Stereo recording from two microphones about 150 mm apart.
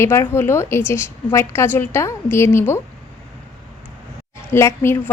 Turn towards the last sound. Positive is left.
turn(degrees=15)  # may be behind; listen again after turning